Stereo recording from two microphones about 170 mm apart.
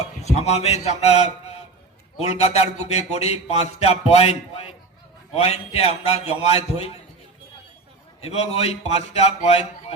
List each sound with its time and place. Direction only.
0.0 s a man's voice: 40° left (ahead or behind)
8.2 s a man's voice: 35° left (ahead or behind)